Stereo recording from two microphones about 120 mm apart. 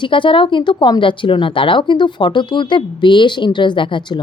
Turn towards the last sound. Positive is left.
turn(degrees=40)  # may be behind; listen again after turning